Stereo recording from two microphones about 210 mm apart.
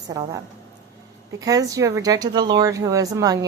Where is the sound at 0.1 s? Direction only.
20° right (ahead or behind).